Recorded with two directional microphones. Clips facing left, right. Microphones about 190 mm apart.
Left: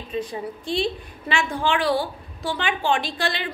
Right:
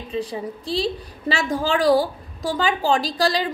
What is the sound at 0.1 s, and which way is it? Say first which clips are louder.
A woman's voice: right 1 dB; 35° right (ahead or behind).